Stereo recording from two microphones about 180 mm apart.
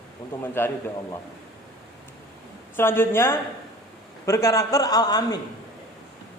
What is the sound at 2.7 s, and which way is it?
A man's voice, 10° left (ahead or behind).